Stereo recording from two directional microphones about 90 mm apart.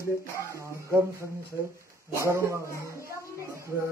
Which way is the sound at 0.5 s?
35° right (ahead or behind).